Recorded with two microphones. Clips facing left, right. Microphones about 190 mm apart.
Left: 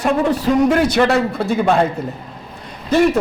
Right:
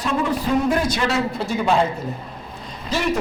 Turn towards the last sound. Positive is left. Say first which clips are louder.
# left 11 dB
turn(degrees=55)  # may be behind; listen again after turning